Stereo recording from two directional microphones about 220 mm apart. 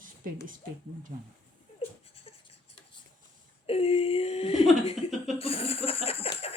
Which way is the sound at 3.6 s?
25° left (ahead or behind).